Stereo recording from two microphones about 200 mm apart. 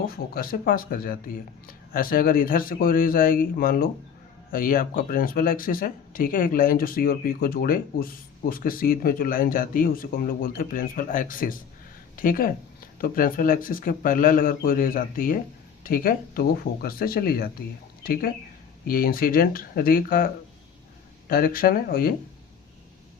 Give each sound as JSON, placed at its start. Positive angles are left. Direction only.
{"t": 0.0, "sound": "speech", "side_deg": 45}